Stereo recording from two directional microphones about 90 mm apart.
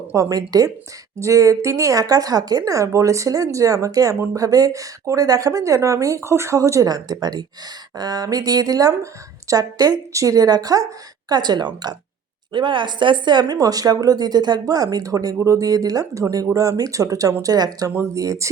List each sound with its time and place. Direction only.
0.1 s speech: 40° right (ahead or behind)
12.5 s speech: 60° right (ahead or behind); by 18.4 s 35° right (ahead or behind)